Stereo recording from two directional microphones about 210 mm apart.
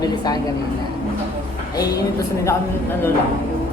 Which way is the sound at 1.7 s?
15° left (ahead or behind).